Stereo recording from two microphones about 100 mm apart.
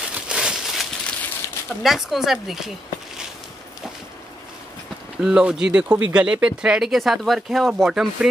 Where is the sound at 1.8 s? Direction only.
Centre (ahead or behind).